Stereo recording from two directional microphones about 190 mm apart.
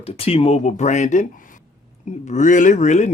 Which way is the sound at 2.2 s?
40° left (ahead or behind).